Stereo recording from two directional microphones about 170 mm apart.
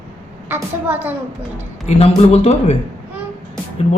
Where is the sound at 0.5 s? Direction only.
10° right (ahead or behind).